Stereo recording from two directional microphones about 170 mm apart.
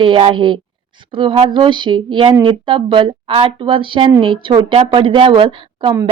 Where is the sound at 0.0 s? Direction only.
30° right (ahead or behind).